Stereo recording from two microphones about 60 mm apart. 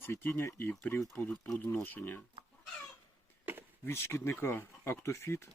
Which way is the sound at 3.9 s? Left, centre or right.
Left.